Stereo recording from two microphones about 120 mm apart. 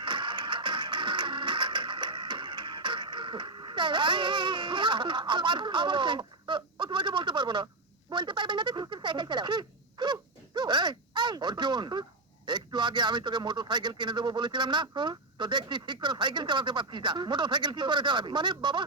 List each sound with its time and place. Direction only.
0.0 s music: 40° right (ahead or behind)
8.1 s a sound: 40° right (ahead or behind)
12.5 s a man's voice: 40° right (ahead or behind)